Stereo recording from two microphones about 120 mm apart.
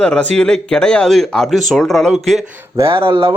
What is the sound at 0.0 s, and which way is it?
A man's voice, 10° left (ahead or behind).